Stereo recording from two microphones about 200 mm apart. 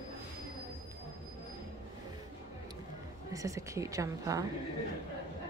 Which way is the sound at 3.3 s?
15° right (ahead or behind).